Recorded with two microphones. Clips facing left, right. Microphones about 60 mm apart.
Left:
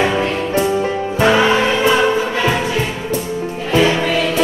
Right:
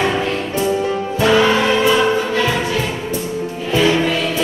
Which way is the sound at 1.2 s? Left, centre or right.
Centre.